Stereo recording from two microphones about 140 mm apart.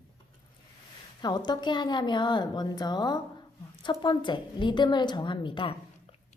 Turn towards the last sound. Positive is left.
turn(degrees=35)  # may be behind; listen again after turning